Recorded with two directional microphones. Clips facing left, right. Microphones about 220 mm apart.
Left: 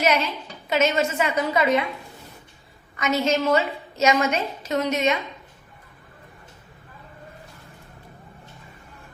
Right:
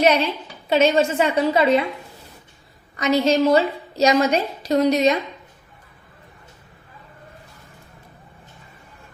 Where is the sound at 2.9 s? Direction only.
35° right (ahead or behind).